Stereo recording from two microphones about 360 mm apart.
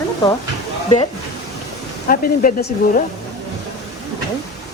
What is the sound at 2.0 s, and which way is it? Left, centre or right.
Speech, left.